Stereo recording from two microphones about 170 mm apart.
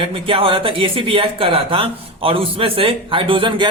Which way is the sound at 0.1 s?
30° right (ahead or behind).